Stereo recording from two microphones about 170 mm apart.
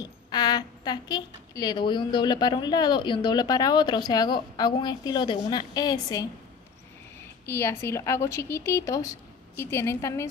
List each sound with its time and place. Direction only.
0.0 s a woman's voice: 25° left (ahead or behind)
7.4 s speech: 15° left (ahead or behind)